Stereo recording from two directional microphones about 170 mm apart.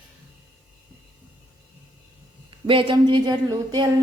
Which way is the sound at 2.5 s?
30° right (ahead or behind).